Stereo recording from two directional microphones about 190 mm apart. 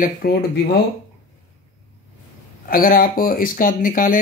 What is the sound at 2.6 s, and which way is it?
Speech, 50° left (ahead or behind).